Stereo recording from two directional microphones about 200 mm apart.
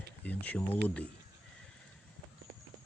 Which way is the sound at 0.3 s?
5° left (ahead or behind).